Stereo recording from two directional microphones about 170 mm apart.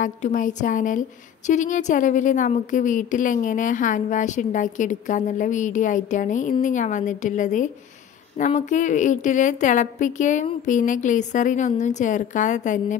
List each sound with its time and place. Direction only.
0.0 s a woman's voice: 50° left (ahead or behind)